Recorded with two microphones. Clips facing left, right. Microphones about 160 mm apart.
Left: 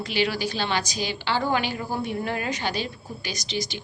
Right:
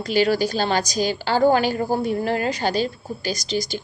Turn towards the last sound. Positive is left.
turn(degrees=-40)  # may be behind; listen again after turning